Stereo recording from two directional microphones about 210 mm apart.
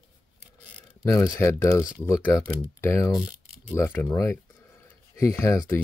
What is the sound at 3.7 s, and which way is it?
Speech, 10° left (ahead or behind).